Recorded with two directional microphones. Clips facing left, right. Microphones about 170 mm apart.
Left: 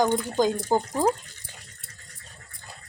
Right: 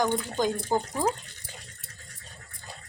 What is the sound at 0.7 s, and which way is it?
Speech, 35° left (ahead or behind).